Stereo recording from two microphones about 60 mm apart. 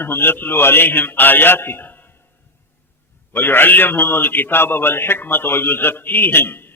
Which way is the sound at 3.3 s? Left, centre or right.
Left.